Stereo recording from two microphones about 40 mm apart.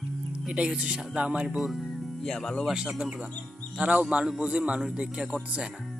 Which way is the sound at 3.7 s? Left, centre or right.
Right.